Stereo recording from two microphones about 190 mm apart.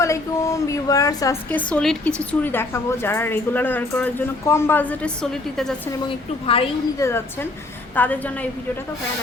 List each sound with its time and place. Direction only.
0.0 s a woman's voice: 15° left (ahead or behind)
6.4 s a woman's voice: 30° left (ahead or behind)
7.0 s a woman's voice: 15° left (ahead or behind)